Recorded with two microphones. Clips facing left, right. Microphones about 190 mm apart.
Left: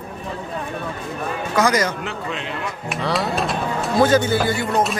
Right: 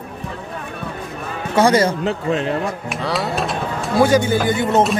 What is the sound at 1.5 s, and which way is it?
Speech, 30° right (ahead or behind).